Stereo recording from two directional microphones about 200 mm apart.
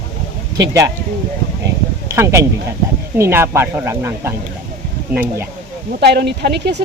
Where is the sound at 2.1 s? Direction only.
15° right (ahead or behind).